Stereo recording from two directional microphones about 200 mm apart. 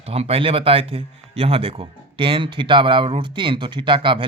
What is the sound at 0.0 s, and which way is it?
Speech, 30° right (ahead or behind).